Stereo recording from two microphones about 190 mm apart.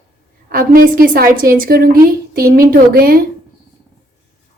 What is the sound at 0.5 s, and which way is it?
A woman's voice, 50° right (ahead or behind).